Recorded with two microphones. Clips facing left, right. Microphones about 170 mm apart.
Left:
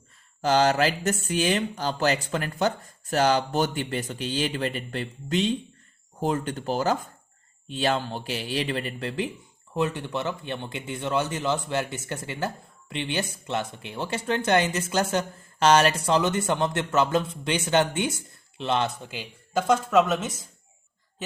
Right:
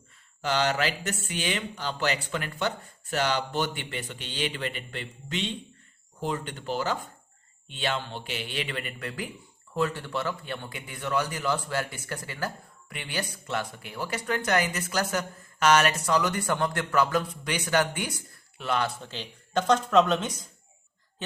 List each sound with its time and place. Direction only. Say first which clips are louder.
0.4 s a man's voice: left 5 dB; 40° left (ahead or behind); by 20.3 s 5° left (ahead or behind)